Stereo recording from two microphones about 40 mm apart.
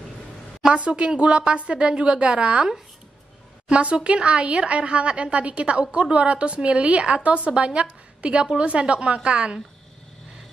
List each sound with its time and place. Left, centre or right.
0.7 s a woman's voice: right
3.6 s a woman's voice: right